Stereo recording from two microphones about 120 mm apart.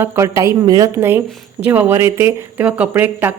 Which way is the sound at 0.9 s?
20° right (ahead or behind).